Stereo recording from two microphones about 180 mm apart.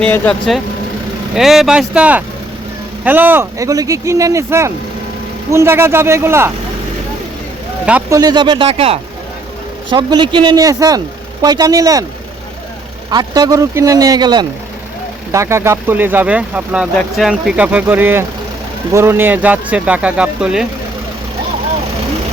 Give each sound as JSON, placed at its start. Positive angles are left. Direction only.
{"t": 0.0, "sound": "speech", "side_deg": 5}
{"t": 8.1, "sound": "speech", "side_deg": -20}
{"t": 13.1, "sound": "speech", "side_deg": -20}